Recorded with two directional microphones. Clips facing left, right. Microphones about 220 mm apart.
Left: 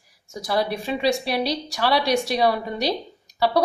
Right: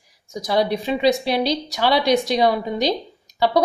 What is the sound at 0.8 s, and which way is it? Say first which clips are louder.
Speech: right 4 dB; 20° right (ahead or behind).